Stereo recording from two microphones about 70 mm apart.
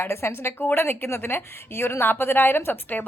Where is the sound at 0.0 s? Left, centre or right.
Left.